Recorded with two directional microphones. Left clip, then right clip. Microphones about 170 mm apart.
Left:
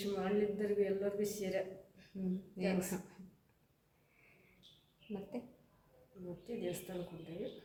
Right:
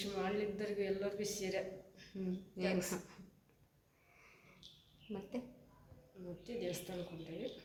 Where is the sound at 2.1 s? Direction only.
Centre (ahead or behind).